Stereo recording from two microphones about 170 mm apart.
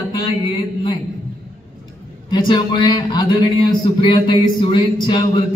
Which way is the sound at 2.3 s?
25° left (ahead or behind).